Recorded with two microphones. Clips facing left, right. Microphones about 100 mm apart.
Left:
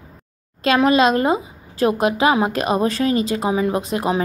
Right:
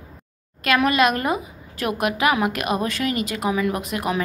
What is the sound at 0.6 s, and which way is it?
A woman's voice, 25° left (ahead or behind).